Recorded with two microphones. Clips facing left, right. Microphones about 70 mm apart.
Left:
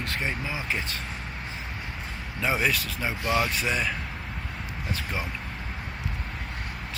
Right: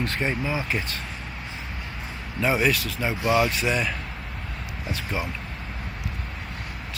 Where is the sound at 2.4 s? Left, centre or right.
Centre.